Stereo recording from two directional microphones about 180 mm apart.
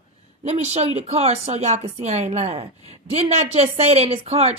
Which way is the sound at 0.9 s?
35° right (ahead or behind).